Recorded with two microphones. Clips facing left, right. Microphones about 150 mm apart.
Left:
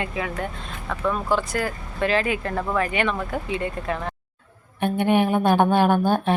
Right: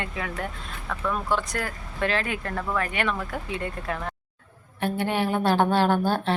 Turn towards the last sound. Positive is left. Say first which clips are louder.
# left 3 dB
turn(degrees=15)  # may be behind; listen again after turning